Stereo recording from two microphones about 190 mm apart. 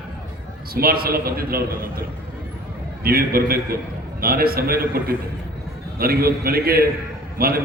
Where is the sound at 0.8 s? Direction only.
50° right (ahead or behind).